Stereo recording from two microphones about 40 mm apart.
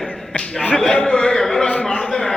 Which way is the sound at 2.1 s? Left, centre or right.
Left.